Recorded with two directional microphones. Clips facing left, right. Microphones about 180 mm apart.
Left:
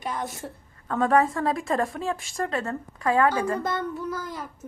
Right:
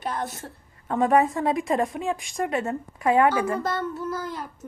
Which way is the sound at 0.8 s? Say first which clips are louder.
Right 1 dB; 20° right (ahead or behind).